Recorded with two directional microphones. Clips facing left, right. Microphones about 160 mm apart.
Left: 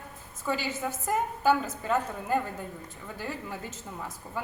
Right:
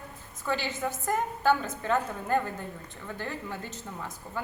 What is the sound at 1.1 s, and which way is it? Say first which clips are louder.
Speech: left 1 dB; 5° left (ahead or behind).